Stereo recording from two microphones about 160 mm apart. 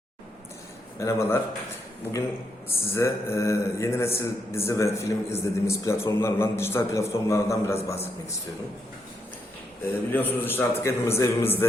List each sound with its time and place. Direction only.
0.9 s a man's voice: 15° left (ahead or behind)
2.6 s a man's voice: 15° left (ahead or behind)
9.8 s a man's voice: 10° left (ahead or behind)